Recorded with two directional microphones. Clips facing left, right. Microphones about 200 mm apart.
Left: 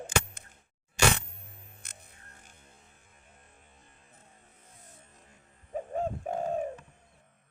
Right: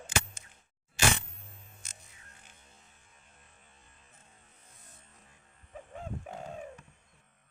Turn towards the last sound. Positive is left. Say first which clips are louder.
# left 11 dB
turn(degrees=45)  # may be behind; listen again after turning